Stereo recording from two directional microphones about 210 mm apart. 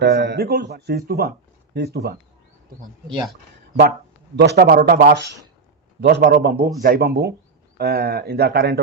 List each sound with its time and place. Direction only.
0.0 s speech: 55° right (ahead or behind)
4.4 s speech: 50° right (ahead or behind)